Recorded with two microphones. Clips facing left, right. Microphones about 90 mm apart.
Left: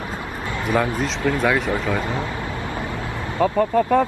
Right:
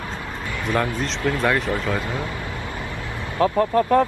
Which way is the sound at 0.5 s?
25° left (ahead or behind).